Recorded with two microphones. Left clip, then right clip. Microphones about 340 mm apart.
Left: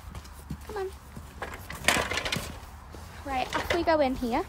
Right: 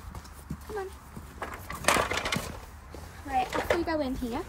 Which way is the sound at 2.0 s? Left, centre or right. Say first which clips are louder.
Right 1 dB; centre.